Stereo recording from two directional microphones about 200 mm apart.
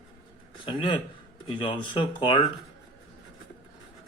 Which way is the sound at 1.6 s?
25° left (ahead or behind).